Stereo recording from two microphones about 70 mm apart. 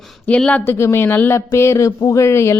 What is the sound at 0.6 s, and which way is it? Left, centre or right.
Speech, left.